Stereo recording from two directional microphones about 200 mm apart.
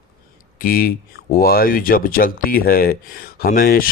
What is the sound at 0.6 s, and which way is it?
Speech, 45° left (ahead or behind).